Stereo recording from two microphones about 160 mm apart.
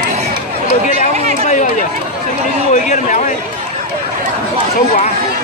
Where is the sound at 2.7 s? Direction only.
50° left (ahead or behind).